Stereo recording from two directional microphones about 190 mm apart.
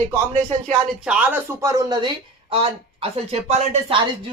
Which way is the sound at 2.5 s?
30° right (ahead or behind).